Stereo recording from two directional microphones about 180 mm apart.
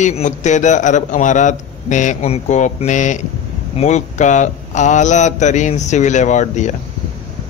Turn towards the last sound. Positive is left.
turn(degrees=40)  # may be behind; listen again after turning